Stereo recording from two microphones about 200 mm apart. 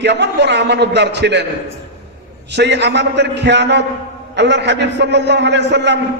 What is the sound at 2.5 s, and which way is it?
A man's voice, 60° right (ahead or behind).